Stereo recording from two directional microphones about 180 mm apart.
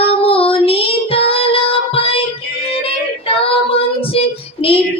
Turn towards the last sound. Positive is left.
turn(degrees=30)  # may be behind; listen again after turning